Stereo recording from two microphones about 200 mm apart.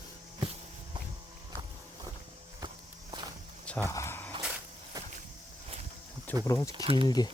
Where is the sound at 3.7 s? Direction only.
10° left (ahead or behind).